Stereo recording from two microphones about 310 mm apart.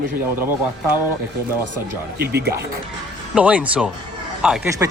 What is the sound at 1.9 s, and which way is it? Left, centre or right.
Speech, right.